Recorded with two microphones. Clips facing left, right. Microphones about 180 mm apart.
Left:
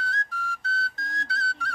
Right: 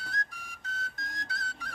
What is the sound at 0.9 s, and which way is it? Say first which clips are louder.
Music: left 6 dB; 20° right (ahead or behind).